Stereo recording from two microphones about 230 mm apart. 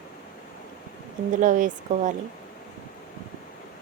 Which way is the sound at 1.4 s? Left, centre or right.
Right.